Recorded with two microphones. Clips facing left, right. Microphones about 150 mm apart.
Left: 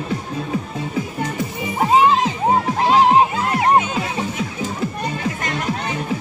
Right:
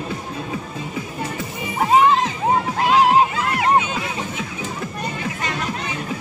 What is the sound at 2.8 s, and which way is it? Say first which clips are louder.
Crowd: left 1 dB; 30° left (ahead or behind).